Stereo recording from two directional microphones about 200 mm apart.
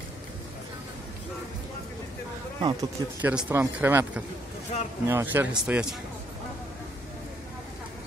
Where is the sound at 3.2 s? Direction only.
10° right (ahead or behind).